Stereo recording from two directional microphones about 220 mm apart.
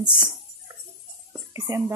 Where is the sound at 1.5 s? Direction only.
15° right (ahead or behind).